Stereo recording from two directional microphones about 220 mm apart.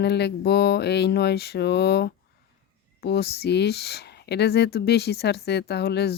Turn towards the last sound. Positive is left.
turn(degrees=45)  # may be behind; listen again after turning